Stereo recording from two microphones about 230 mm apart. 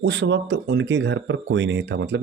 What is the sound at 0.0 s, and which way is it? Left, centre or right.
Speech, right.